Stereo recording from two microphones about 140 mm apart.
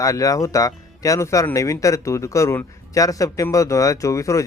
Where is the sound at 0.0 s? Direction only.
25° left (ahead or behind).